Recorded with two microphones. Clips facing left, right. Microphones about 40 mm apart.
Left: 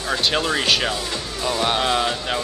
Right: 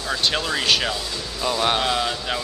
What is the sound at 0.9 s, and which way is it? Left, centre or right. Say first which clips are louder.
Speech: left 2 dB; left.